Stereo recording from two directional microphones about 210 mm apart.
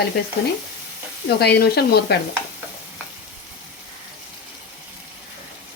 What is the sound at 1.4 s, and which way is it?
Speech, 50° left (ahead or behind).